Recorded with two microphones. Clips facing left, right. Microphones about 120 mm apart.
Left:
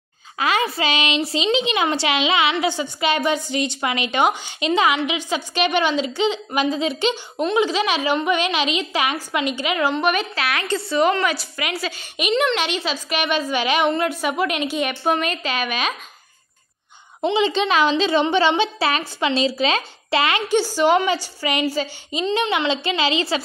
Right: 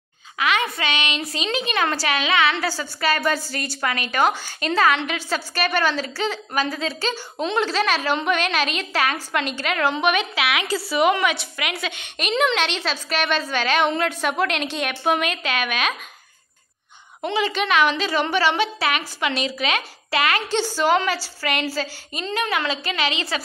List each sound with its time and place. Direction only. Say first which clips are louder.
0.4 s a woman's voice: left 2 dB; 30° left (ahead or behind)
7.3 s a woman's voice: left 1 dB; 10° left (ahead or behind)
9.9 s a woman's voice: even; 5° right (ahead or behind)
14.9 s a woman's voice: left 1 dB; 5° right (ahead or behind)
17.2 s a woman's voice: left 4 dB; 25° left (ahead or behind)
20.4 s a woman's voice: left 3 dB; 15° left (ahead or behind); by 23.4 s 30° left (ahead or behind)